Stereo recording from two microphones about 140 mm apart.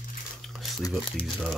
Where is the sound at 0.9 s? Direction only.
Centre (ahead or behind).